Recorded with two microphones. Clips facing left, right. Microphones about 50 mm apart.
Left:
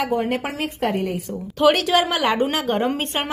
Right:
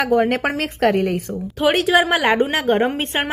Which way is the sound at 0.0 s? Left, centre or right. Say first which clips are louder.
Right 5 dB; right.